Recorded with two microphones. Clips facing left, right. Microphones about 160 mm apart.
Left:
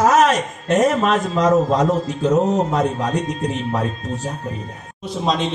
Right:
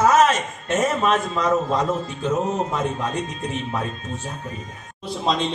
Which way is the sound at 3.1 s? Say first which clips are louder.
Left 5 dB; 75° left (ahead or behind).